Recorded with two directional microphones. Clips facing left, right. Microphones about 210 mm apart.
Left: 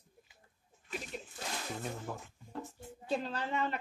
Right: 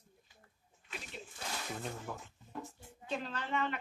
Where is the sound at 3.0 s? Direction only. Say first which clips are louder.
Left 4 dB; 35° left (ahead or behind).